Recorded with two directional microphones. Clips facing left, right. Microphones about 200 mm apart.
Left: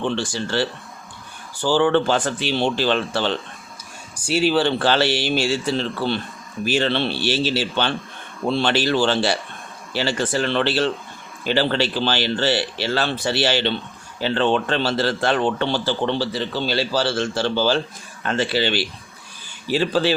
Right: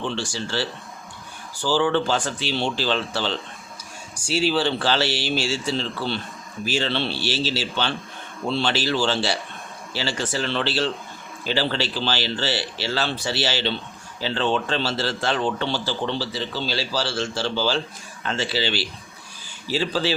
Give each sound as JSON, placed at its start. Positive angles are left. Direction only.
{"t": 0.0, "sound": "a man's voice", "side_deg": 55}